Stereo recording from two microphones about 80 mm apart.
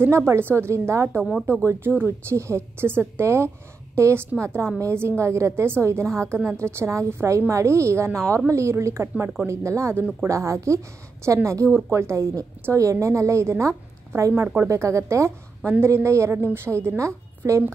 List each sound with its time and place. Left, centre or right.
0.0 s a woman's voice: right
14.7 s a woman's voice: right